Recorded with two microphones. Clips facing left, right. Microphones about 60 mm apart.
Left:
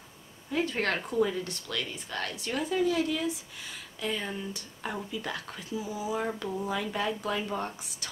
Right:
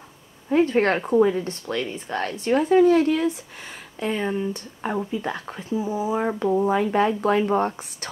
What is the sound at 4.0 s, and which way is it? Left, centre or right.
Speech, right.